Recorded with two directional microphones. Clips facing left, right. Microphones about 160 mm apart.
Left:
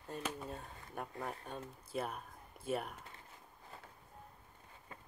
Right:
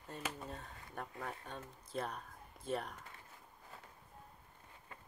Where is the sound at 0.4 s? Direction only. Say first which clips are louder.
Left 2 dB; 10° left (ahead or behind).